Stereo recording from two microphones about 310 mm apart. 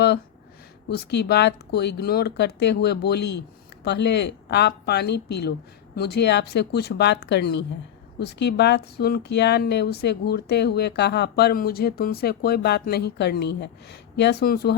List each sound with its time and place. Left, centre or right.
0.9 s speech: left